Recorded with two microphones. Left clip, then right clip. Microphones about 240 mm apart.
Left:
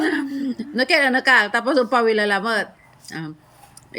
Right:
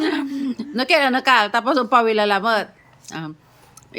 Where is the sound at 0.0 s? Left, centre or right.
Centre.